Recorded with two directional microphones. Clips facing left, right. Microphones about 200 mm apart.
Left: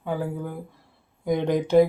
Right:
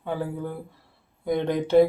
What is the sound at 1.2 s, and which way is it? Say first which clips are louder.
Speech: left 2 dB; 15° left (ahead or behind).